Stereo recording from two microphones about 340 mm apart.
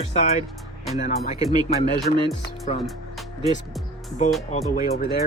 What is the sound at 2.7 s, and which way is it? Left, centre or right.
Speech, centre.